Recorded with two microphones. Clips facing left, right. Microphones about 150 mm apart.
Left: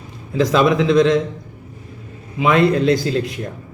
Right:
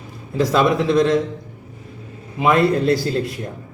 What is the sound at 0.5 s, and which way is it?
Speech, centre (ahead or behind).